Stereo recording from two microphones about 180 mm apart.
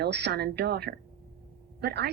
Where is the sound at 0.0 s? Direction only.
65° right (ahead or behind).